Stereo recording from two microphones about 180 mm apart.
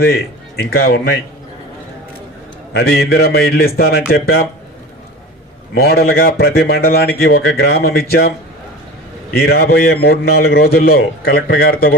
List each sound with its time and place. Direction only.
0.6 s a man's voice: 60° left (ahead or behind)
2.7 s a man's voice: 60° left (ahead or behind)
5.7 s a man's voice: 60° left (ahead or behind)
9.3 s a man's voice: 60° left (ahead or behind)